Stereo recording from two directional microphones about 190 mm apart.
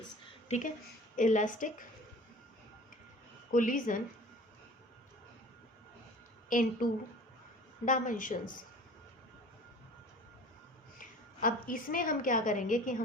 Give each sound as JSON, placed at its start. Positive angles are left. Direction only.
{"t": 0.4, "sound": "a woman's voice", "side_deg": 40}
{"t": 3.5, "sound": "a woman's voice", "side_deg": 45}
{"t": 6.5, "sound": "a woman's voice", "side_deg": 45}
{"t": 7.9, "sound": "a woman's voice", "side_deg": 45}
{"t": 10.9, "sound": "a woman's voice", "side_deg": 45}